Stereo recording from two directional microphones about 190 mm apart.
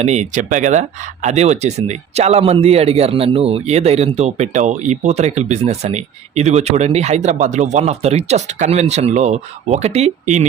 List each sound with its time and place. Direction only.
0.0 s speech: 40° right (ahead or behind)